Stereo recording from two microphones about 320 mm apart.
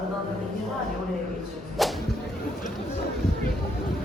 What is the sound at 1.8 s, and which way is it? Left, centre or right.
Whip, centre.